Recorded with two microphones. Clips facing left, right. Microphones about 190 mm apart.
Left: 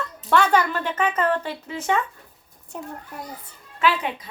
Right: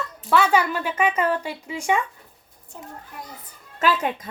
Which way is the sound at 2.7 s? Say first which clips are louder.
Left 6 dB; 65° left (ahead or behind).